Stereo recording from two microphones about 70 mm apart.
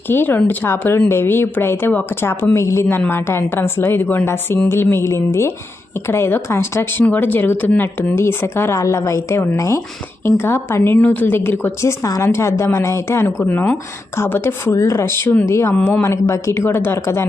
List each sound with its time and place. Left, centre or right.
0.1 s a woman's voice: left
7.0 s a woman's voice: left
8.8 s a woman's voice: left
10.2 s a woman's voice: left
12.0 s a woman's voice: left
12.3 s a woman's voice: left